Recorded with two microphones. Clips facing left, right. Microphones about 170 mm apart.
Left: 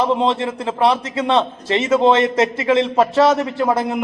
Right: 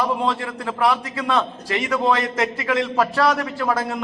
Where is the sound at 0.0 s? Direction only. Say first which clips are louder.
Left 5 dB; 25° left (ahead or behind).